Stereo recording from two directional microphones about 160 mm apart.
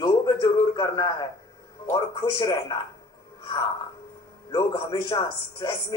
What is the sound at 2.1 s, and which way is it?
Snicker, 25° left (ahead or behind).